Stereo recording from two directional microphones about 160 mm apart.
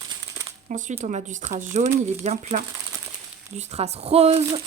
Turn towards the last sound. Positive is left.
turn(degrees=-40)  # may be behind; listen again after turning